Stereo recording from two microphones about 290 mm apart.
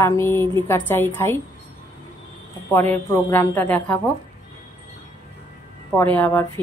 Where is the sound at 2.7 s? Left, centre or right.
Centre.